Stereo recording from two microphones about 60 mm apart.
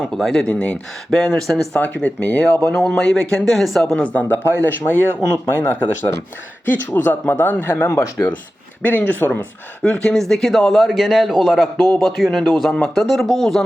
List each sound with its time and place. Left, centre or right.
0.0 s speech: centre
1.1 s a man's voice: centre
1.7 s speech: left; by 3.8 s centre
3.9 s speech: left
5.3 s speech: left
9.8 s a man's voice: centre